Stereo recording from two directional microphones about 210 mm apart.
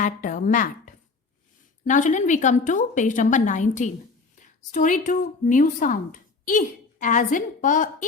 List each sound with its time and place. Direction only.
0.0 s speech: 35° left (ahead or behind)
1.8 s speech: 35° left (ahead or behind)